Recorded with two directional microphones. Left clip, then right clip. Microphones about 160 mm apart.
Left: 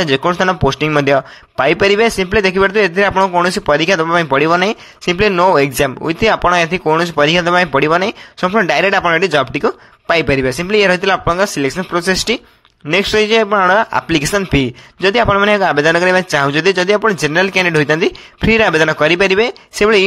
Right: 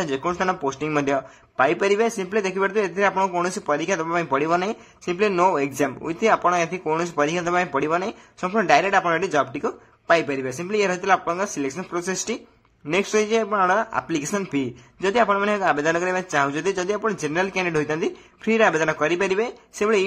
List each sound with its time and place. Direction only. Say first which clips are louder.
0.0 s speech: left 10 dB; 30° left (ahead or behind)